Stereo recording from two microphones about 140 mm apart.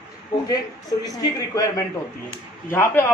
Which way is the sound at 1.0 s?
25° left (ahead or behind).